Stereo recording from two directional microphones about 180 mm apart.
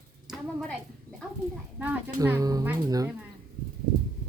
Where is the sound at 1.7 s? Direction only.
10° right (ahead or behind).